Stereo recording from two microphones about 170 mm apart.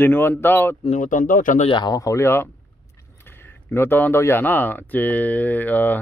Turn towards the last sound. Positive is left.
turn(degrees=10)  # may be behind; listen again after turning